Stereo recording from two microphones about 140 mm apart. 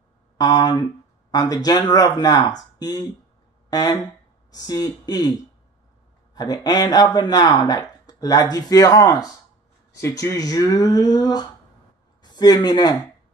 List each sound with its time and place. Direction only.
0.4 s speech: 30° left (ahead or behind)
6.3 s speech: 25° left (ahead or behind)